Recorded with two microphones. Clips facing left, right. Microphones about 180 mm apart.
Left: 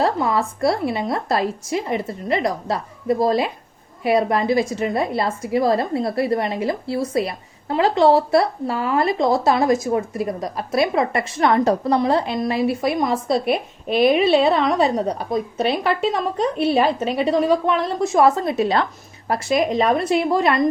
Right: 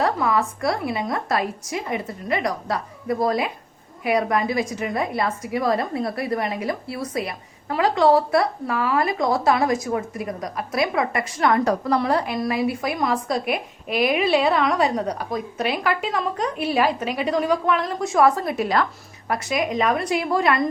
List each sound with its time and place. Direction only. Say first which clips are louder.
0.0 s a woman's voice: left 2 dB; 30° left (ahead or behind)